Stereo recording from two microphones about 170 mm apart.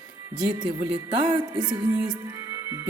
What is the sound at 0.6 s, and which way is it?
Music, 30° right (ahead or behind).